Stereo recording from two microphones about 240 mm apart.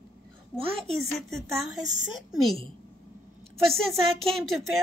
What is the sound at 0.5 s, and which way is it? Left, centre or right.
Speech, right.